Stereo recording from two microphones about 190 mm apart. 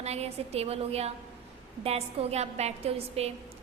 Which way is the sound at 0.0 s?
35° right (ahead or behind).